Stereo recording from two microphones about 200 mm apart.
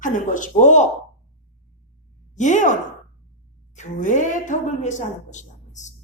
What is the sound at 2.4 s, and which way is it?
A woman's voice, 40° left (ahead or behind).